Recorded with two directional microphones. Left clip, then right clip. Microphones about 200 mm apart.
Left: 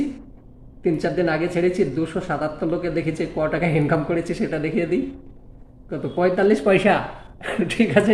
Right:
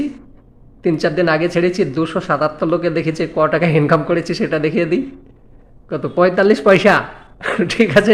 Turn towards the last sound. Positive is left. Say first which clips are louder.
# right 6 dB
turn(degrees=-45)  # may be behind; listen again after turning